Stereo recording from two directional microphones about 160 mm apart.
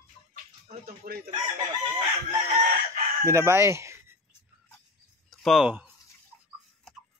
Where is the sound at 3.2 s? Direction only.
15° right (ahead or behind).